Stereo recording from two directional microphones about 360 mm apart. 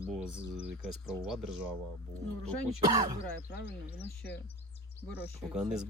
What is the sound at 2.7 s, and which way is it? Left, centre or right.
Speech, centre.